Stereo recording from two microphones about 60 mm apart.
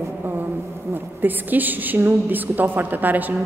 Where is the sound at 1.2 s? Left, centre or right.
Right.